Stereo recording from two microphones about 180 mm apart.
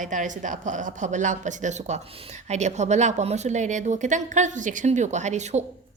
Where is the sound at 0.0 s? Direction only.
45° right (ahead or behind).